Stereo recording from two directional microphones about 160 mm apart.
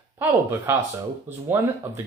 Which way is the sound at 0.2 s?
15° right (ahead or behind).